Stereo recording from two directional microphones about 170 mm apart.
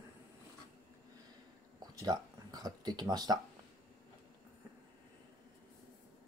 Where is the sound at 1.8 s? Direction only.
20° right (ahead or behind).